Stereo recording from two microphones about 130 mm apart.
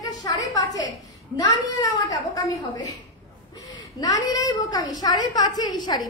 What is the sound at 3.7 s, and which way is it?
A woman's voice, 30° left (ahead or behind).